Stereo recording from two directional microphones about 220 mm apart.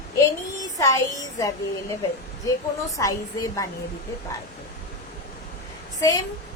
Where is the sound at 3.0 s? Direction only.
15° left (ahead or behind).